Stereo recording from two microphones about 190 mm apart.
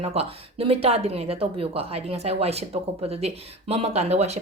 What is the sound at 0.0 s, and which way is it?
Speech, 30° right (ahead or behind).